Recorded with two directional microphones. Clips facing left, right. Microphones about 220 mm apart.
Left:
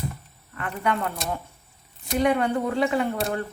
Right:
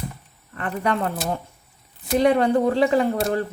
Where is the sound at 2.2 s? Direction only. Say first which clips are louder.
Right 5 dB; 35° right (ahead or behind).